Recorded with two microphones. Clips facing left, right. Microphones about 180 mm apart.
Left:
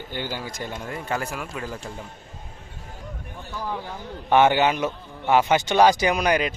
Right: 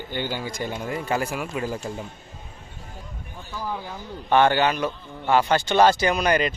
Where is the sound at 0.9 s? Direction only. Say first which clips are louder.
Right 3 dB; 10° right (ahead or behind).